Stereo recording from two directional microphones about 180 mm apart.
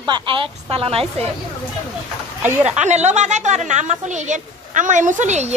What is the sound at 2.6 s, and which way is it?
A woman's voice, 40° right (ahead or behind).